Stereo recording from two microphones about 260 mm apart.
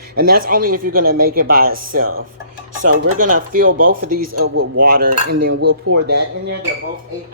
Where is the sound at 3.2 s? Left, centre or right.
Right.